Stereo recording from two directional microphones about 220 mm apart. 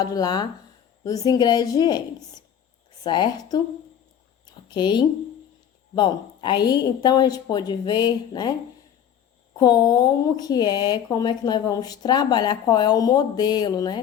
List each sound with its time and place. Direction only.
0.0 s speech: 15° left (ahead or behind)
4.4 s a sound: 20° left (ahead or behind)
5.9 s a woman's voice: 20° left (ahead or behind)
9.6 s speech: 15° left (ahead or behind)